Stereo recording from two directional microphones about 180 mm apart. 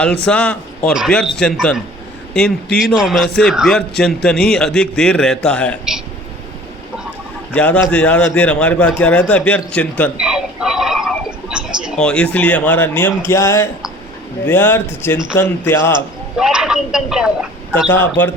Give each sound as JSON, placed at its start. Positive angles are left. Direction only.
{"t": 0.3, "sound": "a man's voice", "side_deg": 5}
{"t": 7.5, "sound": "a man's voice", "side_deg": 5}
{"t": 10.2, "sound": "a sound", "side_deg": -5}
{"t": 14.4, "sound": "a man's voice", "side_deg": 10}
{"t": 16.4, "sound": "a sound", "side_deg": -5}
{"t": 17.8, "sound": "a man's voice", "side_deg": 10}